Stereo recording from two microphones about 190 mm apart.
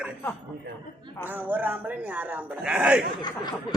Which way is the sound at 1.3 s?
10° right (ahead or behind).